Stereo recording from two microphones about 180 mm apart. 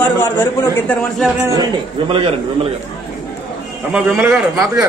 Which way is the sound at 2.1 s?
30° right (ahead or behind).